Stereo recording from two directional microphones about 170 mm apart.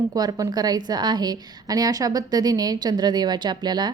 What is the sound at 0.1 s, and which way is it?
A woman's voice, 20° right (ahead or behind).